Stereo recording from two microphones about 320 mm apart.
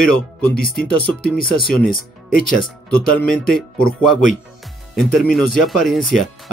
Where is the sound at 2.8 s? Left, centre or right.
Centre.